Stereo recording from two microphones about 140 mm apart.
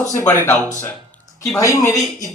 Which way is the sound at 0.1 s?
20° left (ahead or behind).